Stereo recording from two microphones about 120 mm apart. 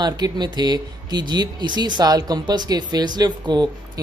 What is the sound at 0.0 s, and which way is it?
Speech, 35° right (ahead or behind).